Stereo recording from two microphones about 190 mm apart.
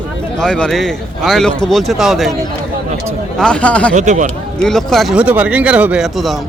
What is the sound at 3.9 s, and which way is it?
Speech, 40° right (ahead or behind).